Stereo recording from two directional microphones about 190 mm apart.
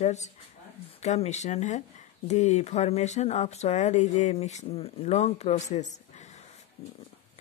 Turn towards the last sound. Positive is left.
turn(degrees=35)  # may be behind; listen again after turning